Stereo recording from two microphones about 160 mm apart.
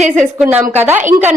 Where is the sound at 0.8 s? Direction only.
15° right (ahead or behind).